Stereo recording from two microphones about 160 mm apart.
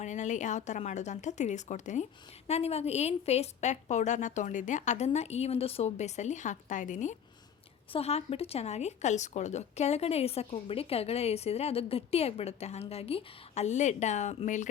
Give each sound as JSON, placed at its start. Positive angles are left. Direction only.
{"t": 0.0, "sound": "a woman's voice", "side_deg": 50}
{"t": 7.9, "sound": "a woman's voice", "side_deg": 40}